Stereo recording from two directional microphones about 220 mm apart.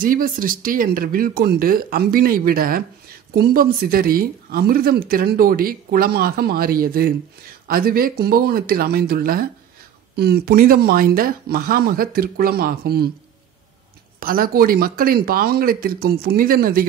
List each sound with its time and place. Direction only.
0.0 s speech: 40° right (ahead or behind)
14.2 s speech: 40° right (ahead or behind)